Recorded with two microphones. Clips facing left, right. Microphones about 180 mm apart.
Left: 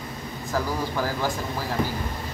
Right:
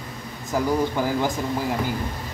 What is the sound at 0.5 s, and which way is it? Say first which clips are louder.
Speech: right 5 dB; 20° right (ahead or behind).